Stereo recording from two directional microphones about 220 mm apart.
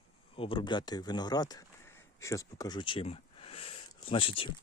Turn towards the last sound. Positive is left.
turn(degrees=25)  # may be behind; listen again after turning